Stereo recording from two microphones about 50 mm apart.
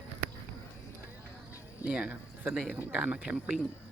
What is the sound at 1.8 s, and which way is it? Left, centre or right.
Speech, right.